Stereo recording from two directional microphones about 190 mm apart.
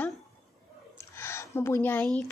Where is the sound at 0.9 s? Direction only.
15° left (ahead or behind).